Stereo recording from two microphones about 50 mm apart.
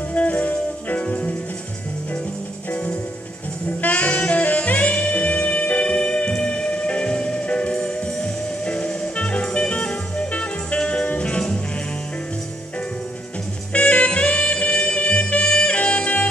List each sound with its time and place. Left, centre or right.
0.1 s music: left
3.8 s saxophone: left
11.1 s music: left
13.7 s music: left